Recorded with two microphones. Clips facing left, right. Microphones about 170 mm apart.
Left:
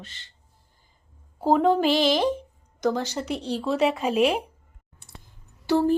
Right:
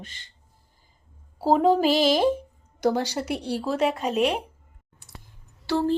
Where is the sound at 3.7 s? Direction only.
Centre (ahead or behind).